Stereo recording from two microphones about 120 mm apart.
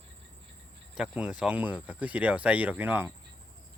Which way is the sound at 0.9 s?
5° right (ahead or behind).